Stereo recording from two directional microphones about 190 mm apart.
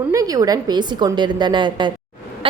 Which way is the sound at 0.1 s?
20° right (ahead or behind).